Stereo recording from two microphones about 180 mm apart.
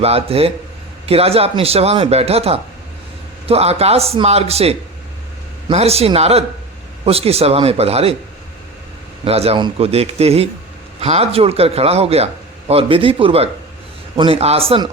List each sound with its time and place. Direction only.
0.0 s a man's voice: 35° right (ahead or behind)
9.2 s a man's voice: 35° right (ahead or behind)